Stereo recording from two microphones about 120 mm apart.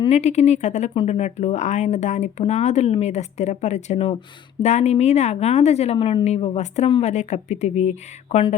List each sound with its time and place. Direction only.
0.1 s speech: 65° left (ahead or behind)
4.6 s a woman's voice: 70° left (ahead or behind)
7.0 s speech: 70° left (ahead or behind)